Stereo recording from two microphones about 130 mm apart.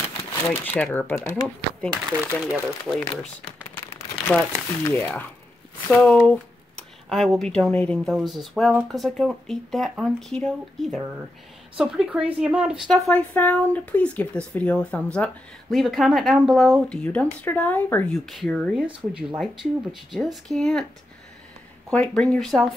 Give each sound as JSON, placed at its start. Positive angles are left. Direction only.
{"t": 0.2, "sound": "speech", "side_deg": 20}
{"t": 2.0, "sound": "speech", "side_deg": -10}
{"t": 4.8, "sound": "speech", "side_deg": 15}
{"t": 13.1, "sound": "speech", "side_deg": 15}
{"t": 18.1, "sound": "speech", "side_deg": 0}
{"t": 21.9, "sound": "speech", "side_deg": 10}